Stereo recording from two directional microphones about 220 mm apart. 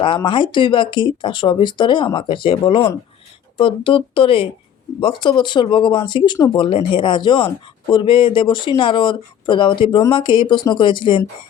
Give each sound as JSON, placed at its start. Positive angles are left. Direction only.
{"t": 0.0, "sound": "speech", "side_deg": 20}